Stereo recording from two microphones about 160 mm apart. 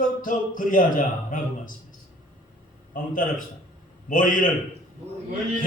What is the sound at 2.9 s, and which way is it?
Speech, 55° left (ahead or behind).